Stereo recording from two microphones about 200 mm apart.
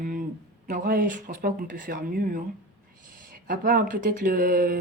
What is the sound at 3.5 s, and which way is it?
Speech, 45° right (ahead or behind).